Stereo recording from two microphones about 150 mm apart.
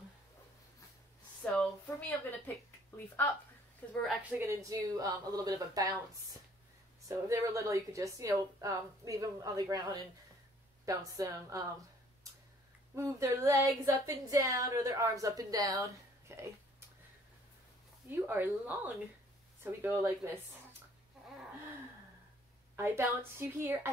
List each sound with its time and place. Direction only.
1.4 s speech: 5° left (ahead or behind)
3.8 s a woman's voice: 10° left (ahead or behind)
4.2 s speech: 10° right (ahead or behind)
7.1 s speech: 20° right (ahead or behind)
10.9 s speech: 25° right (ahead or behind)
12.9 s speech: 20° right (ahead or behind)
16.3 s a sound: 20° right (ahead or behind)
18.1 s a woman's voice: 15° right (ahead or behind)
22.8 s a woman's voice: 15° right (ahead or behind)